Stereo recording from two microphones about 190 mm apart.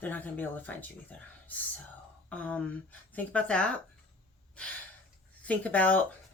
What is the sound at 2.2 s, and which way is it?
Speech, 5° left (ahead or behind).